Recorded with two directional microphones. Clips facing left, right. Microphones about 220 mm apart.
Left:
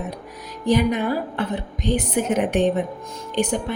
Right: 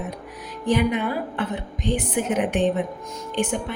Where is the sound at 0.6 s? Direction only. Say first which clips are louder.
Left 2 dB; 40° left (ahead or behind).